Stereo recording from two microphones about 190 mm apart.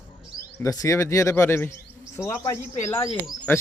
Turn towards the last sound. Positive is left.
turn(degrees=10)  # may be behind; listen again after turning